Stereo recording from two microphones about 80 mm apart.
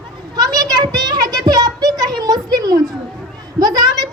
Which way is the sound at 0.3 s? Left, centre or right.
Right.